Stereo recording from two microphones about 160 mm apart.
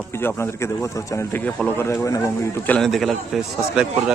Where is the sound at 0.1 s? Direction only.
15° left (ahead or behind).